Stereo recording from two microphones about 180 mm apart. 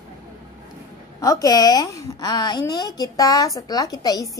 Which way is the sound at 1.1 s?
20° left (ahead or behind).